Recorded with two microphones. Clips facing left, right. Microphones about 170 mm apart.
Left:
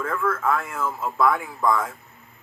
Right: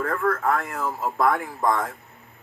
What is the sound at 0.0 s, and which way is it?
Speech, 40° right (ahead or behind).